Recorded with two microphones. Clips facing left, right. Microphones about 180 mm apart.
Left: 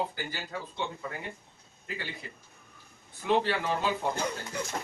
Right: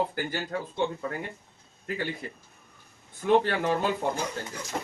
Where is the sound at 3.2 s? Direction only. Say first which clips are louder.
Right 4 dB; 45° right (ahead or behind).